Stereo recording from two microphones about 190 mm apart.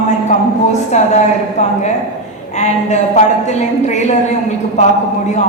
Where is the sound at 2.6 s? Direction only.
35° left (ahead or behind).